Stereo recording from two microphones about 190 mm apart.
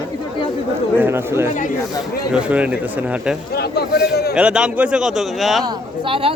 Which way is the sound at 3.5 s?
55° left (ahead or behind).